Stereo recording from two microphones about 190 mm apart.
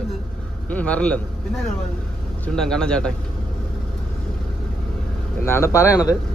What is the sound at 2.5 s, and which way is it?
Speech, 5° left (ahead or behind).